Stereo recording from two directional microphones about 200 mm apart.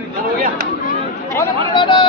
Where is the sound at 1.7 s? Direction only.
25° left (ahead or behind).